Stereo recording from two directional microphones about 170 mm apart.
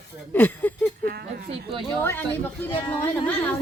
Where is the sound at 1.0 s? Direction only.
65° right (ahead or behind).